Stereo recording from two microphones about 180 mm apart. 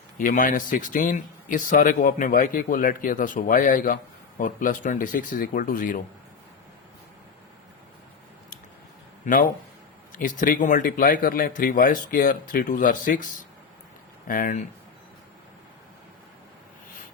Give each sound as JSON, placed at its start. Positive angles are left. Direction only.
{"t": 0.2, "sound": "speech", "side_deg": 50}
{"t": 9.2, "sound": "speech", "side_deg": 45}